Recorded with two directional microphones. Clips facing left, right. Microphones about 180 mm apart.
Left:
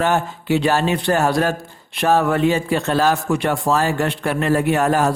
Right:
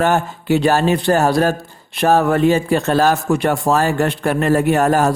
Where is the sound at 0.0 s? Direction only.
45° right (ahead or behind).